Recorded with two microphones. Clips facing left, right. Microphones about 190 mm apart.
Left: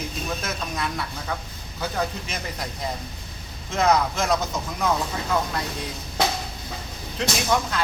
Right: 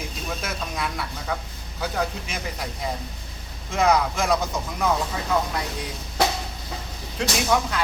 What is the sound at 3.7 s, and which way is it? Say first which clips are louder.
Speech: even; 10° right (ahead or behind).